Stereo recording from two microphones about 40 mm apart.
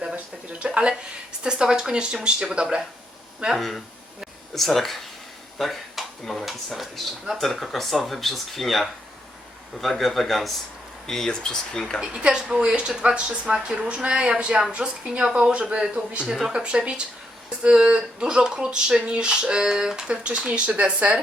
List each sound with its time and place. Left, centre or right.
0.6 s speech: right
3.6 s speech: centre
5.5 s a sound: centre
6.4 s speech: centre
12.2 s speech: right